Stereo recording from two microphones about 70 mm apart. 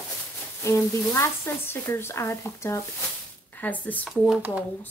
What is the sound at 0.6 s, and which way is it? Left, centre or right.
Speech, left.